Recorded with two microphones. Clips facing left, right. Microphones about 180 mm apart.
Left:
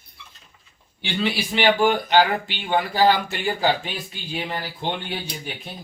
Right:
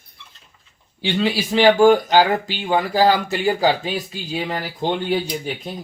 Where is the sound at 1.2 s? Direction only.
40° right (ahead or behind).